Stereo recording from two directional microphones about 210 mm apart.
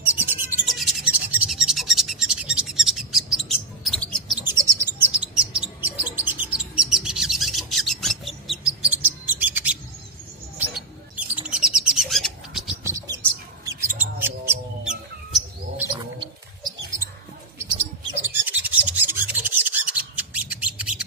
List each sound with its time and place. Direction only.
0.0 s music: 10° right (ahead or behind)
3.8 s a sound: 5° left (ahead or behind)
4.4 s chirp: 10° right (ahead or behind)
11.4 s bird: 5° right (ahead or behind)
12.8 s bird: 15° right (ahead or behind)
14.2 s a sound: 10° right (ahead or behind)
17.6 s bird: 25° right (ahead or behind)
18.2 s rub: 10° right (ahead or behind)